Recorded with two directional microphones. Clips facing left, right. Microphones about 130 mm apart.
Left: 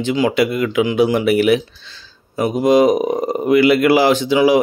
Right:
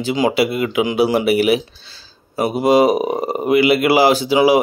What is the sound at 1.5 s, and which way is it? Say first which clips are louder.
Speech: left 1 dB; 35° right (ahead or behind).